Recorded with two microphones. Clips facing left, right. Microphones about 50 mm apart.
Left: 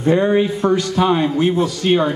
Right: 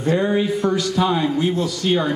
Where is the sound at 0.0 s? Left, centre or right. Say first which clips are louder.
Left 4 dB; left.